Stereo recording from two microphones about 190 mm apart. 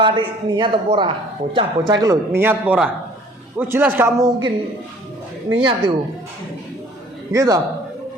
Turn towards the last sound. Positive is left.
turn(degrees=-15)  # may be behind; listen again after turning